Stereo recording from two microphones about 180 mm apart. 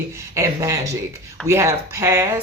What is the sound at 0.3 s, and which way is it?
Speech, 15° right (ahead or behind).